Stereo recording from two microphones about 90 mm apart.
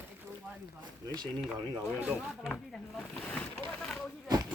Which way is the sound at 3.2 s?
15° left (ahead or behind).